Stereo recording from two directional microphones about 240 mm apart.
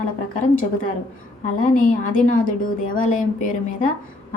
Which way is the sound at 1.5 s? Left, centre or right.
Left.